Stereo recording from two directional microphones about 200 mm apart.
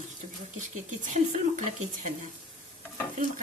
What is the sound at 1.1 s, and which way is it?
Speech, 35° right (ahead or behind).